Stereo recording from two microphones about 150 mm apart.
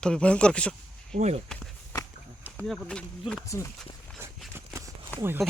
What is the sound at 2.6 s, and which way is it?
Speech, 5° left (ahead or behind).